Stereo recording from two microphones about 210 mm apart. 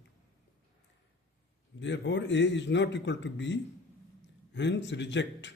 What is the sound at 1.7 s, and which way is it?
A man's voice, 60° left (ahead or behind).